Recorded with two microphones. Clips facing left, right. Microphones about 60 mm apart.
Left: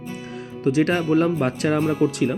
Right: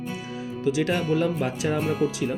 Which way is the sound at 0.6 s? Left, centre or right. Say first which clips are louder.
Left 4 dB; left.